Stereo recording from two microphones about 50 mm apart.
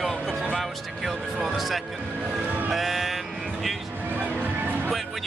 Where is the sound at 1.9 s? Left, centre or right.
Right.